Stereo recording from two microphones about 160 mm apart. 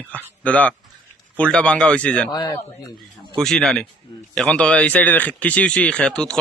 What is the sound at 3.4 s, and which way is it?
Speech, 5° left (ahead or behind).